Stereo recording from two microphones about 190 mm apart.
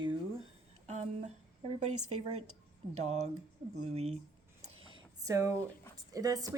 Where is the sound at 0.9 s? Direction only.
35° right (ahead or behind).